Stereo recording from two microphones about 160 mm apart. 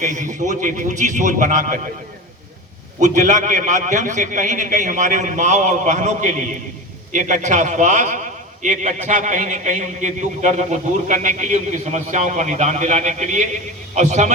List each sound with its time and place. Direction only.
0.0 s a man's voice: 50° right (ahead or behind)
3.0 s a man's voice: 50° right (ahead or behind)